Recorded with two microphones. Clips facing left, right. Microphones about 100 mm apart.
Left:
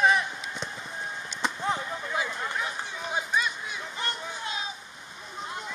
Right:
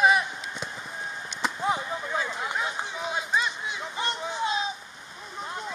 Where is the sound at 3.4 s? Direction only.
25° right (ahead or behind).